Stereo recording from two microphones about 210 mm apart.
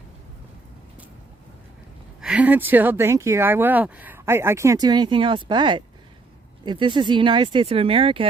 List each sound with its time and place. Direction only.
2.2 s speech: 5° right (ahead or behind); by 8.3 s 25° right (ahead or behind)